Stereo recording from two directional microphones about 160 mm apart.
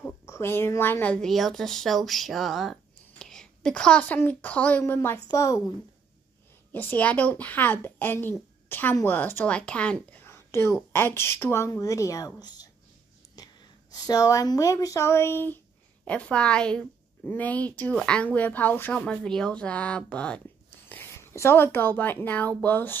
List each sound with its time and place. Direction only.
0.0 s speech: 15° left (ahead or behind)
6.7 s a woman's voice: 10° left (ahead or behind)
13.4 s wheeze: 20° left (ahead or behind)
13.9 s a woman's voice: 25° left (ahead or behind)